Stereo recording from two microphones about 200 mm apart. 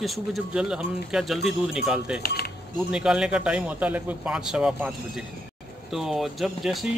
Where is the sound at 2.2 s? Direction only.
50° left (ahead or behind).